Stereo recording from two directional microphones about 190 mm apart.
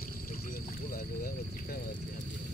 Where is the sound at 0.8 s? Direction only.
50° left (ahead or behind).